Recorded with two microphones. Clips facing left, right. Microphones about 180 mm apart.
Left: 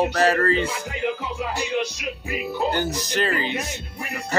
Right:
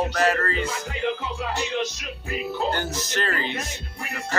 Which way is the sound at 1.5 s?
10° left (ahead or behind).